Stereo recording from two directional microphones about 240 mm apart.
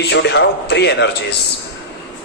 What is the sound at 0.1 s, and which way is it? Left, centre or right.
A man's voice, left.